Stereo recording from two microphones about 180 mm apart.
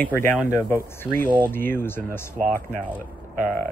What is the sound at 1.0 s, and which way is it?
Speech, 10° left (ahead or behind).